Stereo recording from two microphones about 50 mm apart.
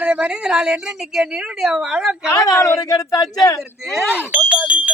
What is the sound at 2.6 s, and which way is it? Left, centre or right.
Speech, left.